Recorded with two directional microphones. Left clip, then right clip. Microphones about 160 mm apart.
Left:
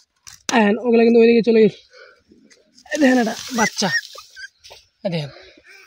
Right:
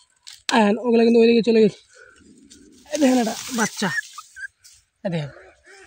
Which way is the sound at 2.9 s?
40° left (ahead or behind).